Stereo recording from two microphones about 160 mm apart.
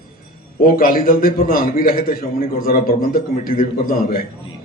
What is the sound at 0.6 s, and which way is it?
A man's voice, 65° left (ahead or behind).